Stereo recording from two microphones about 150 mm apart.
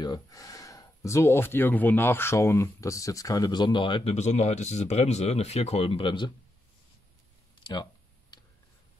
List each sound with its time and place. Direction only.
0.0 s speech: 25° left (ahead or behind)
4.1 s speech: 50° left (ahead or behind); by 6.3 s 35° left (ahead or behind)
7.6 s a sound: 30° left (ahead or behind)